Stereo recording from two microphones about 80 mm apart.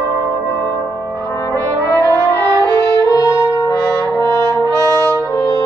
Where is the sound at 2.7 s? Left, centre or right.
Left.